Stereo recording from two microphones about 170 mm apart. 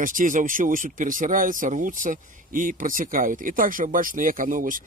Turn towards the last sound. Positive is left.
turn(degrees=-50)  # may be behind; listen again after turning